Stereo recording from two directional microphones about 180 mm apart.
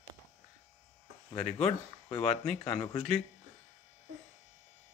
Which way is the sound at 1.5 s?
35° left (ahead or behind).